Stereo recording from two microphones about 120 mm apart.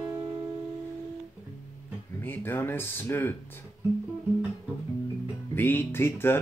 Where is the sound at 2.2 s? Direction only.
15° left (ahead or behind).